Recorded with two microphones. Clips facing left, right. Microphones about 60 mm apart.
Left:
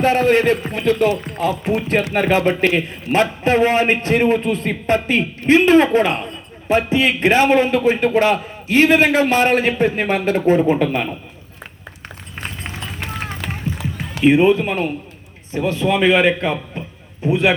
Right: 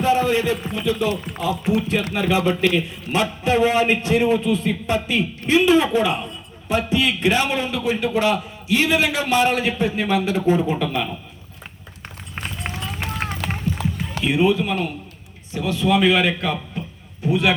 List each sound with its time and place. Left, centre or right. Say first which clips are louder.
0.0 s a man's voice: left 4 dB; left
13.4 s run: right 1 dB; centre
14.3 s a man's voice: left 6 dB; left